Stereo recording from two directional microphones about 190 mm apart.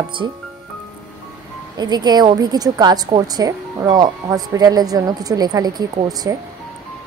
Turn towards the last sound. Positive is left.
turn(degrees=-20)  # may be behind; listen again after turning